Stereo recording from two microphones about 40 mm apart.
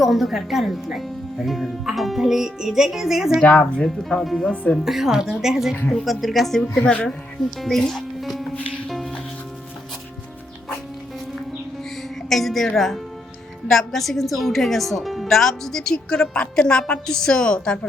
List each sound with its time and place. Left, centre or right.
0.0 s a woman's voice: centre
4.2 s a woman's voice: centre
4.4 s speech: left
4.8 s speech: centre
6.1 s a woman's voice: centre
6.6 s a woman's voice: left
7.6 s speech: centre
8.2 s music: centre
12.3 s a woman's voice: centre; by 17.7 s left